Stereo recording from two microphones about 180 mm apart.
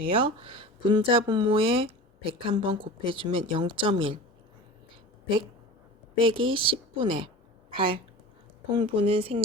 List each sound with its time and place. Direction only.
0.0 s speech: 30° right (ahead or behind)
6.1 s speech: 30° right (ahead or behind)